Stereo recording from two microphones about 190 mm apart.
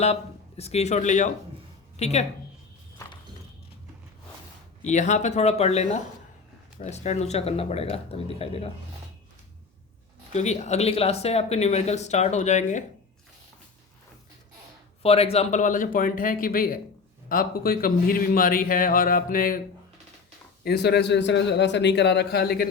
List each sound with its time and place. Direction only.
0.0 s speech: 35° left (ahead or behind)
4.8 s speech: 40° left (ahead or behind)
10.3 s speech: 35° left (ahead or behind)
15.0 s a man's voice: 30° left (ahead or behind); by 19.6 s 45° left (ahead or behind)
20.7 s a man's voice: 60° left (ahead or behind)